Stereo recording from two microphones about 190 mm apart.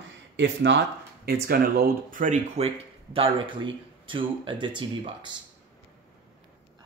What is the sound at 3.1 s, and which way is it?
Speech, 25° right (ahead or behind).